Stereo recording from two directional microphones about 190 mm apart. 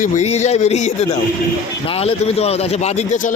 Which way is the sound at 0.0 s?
35° left (ahead or behind).